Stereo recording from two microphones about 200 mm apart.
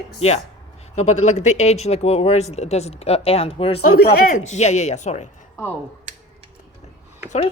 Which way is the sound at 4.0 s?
50° left (ahead or behind).